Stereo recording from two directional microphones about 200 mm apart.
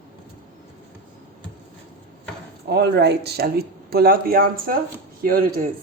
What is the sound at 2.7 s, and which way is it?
Speech, 55° right (ahead or behind).